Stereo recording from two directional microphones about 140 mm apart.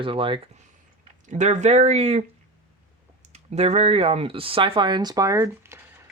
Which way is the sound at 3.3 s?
50° right (ahead or behind).